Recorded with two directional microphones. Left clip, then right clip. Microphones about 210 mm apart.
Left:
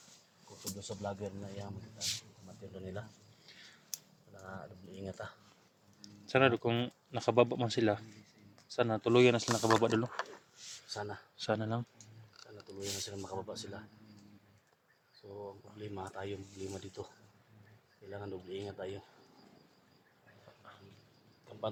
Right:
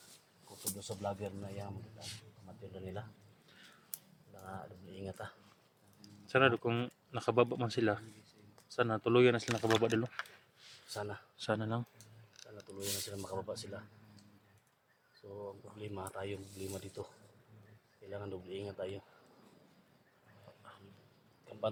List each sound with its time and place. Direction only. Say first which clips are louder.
0.8 s speech: right 1 dB; 5° right (ahead or behind)
2.0 s speech: left 13 dB; 50° left (ahead or behind)
2.7 s speech: left 1 dB; centre (ahead or behind)
4.4 s speech: even; centre (ahead or behind)
6.0 s speech: left 1 dB; 15° left (ahead or behind)
10.8 s speech: even; centre (ahead or behind)
15.4 s speech: even; 5° left (ahead or behind)
18.1 s speech: left 1 dB; 10° left (ahead or behind)
21.5 s a sound: right 1 dB; 10° left (ahead or behind)